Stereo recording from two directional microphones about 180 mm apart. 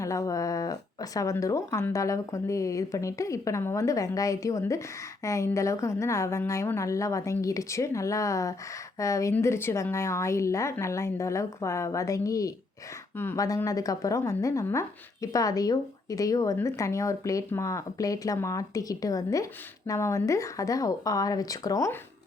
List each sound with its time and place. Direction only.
0.0 s a woman's voice: 15° left (ahead or behind)